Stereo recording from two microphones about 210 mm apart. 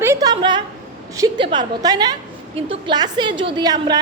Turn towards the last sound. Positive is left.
turn(degrees=-20)  # may be behind; listen again after turning